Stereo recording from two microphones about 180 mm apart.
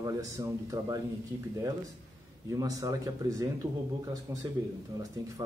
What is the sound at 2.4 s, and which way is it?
Speech, 20° right (ahead or behind).